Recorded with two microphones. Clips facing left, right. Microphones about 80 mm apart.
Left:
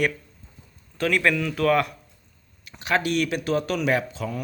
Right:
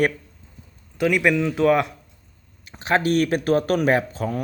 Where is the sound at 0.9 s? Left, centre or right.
Centre.